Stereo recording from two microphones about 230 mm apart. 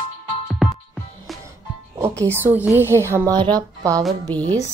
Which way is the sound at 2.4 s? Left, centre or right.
Centre.